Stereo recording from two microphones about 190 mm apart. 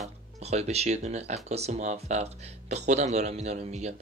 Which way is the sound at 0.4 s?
35° right (ahead or behind).